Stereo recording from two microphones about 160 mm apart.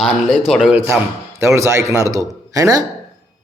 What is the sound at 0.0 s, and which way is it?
Speech, 5° right (ahead or behind).